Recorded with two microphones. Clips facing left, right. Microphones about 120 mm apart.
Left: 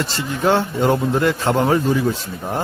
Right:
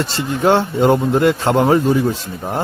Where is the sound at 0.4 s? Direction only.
30° right (ahead or behind).